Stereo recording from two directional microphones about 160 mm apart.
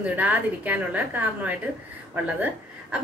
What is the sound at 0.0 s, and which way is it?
A woman's voice, 10° right (ahead or behind).